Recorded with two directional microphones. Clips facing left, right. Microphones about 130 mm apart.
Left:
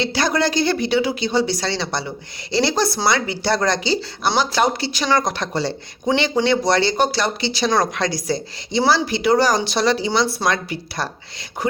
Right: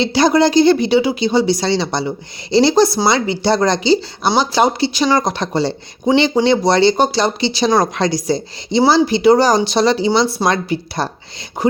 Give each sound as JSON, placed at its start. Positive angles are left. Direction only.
{"t": 0.0, "sound": "a woman's voice", "side_deg": -15}